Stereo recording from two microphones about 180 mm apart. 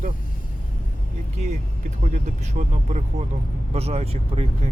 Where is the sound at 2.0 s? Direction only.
40° right (ahead or behind).